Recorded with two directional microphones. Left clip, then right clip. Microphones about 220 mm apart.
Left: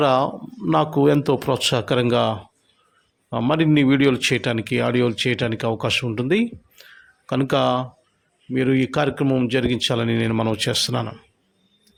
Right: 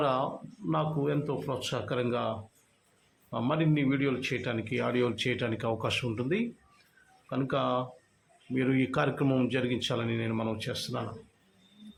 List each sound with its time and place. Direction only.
0.0 s a man's voice: 40° left (ahead or behind)